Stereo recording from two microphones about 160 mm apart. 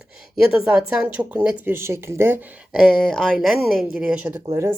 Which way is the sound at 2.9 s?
5° left (ahead or behind).